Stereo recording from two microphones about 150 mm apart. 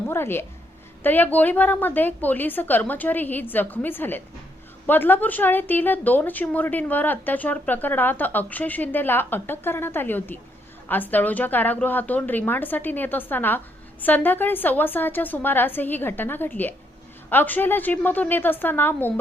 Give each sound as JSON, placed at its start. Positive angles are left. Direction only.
{"t": 0.1, "sound": "a woman's voice", "side_deg": 15}